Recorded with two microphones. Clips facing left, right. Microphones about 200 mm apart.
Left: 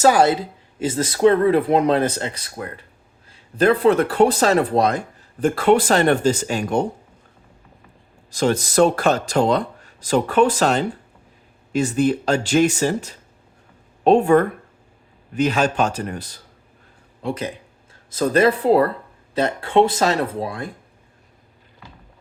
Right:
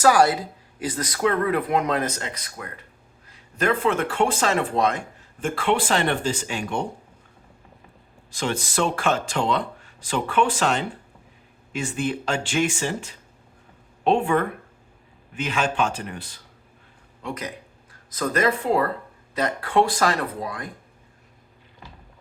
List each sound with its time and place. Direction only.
0.0 s speech: 25° left (ahead or behind); by 6.8 s 40° left (ahead or behind)
8.3 s speech: 40° left (ahead or behind)
17.2 s speech: 30° left (ahead or behind)